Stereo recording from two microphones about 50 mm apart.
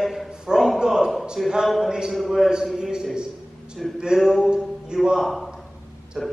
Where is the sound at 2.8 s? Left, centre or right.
Centre.